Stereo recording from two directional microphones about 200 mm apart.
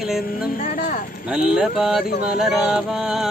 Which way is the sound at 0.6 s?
40° left (ahead or behind).